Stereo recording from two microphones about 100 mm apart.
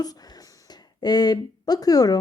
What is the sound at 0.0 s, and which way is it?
Speech, 40° left (ahead or behind).